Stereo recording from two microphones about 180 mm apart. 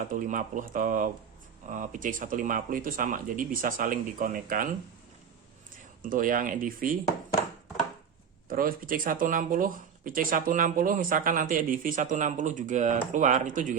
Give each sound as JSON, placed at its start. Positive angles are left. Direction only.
{"t": 0.1, "sound": "speech", "side_deg": -45}
{"t": 6.0, "sound": "speech", "side_deg": -50}
{"t": 8.4, "sound": "speech", "side_deg": -50}